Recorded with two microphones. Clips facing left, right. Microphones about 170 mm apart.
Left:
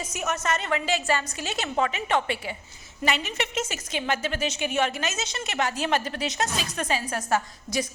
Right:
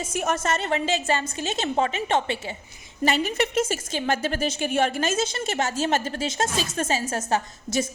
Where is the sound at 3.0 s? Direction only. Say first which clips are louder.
Right 5 dB; 40° right (ahead or behind).